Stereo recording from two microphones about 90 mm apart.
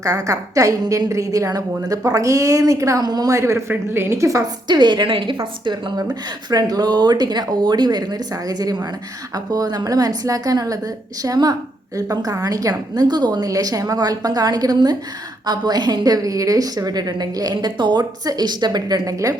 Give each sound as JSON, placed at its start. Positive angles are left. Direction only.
{"t": 0.0, "sound": "a woman's voice", "side_deg": -40}
{"t": 4.7, "sound": "a woman's voice", "side_deg": -55}
{"t": 6.0, "sound": "a woman's voice", "side_deg": -45}